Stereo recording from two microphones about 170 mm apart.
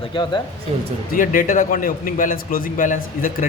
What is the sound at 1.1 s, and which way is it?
A man's voice, 55° left (ahead or behind).